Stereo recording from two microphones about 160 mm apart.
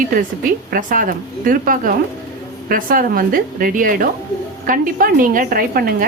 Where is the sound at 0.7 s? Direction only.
60° right (ahead or behind).